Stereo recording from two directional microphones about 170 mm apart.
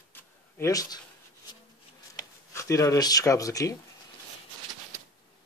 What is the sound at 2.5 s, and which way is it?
Speech, 20° left (ahead or behind).